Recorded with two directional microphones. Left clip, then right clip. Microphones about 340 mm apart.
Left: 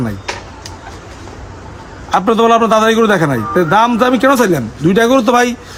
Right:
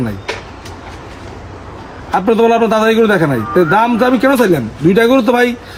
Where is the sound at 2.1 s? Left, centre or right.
Centre.